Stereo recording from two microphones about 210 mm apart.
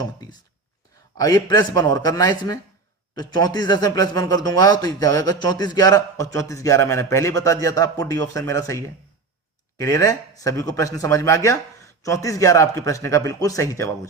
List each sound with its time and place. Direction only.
0.0 s a man's voice: 20° left (ahead or behind)